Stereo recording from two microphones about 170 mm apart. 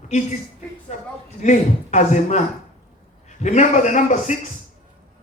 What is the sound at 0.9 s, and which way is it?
A man's voice, 40° left (ahead or behind).